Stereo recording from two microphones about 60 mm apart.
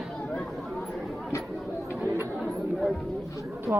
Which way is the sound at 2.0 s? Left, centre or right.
Right.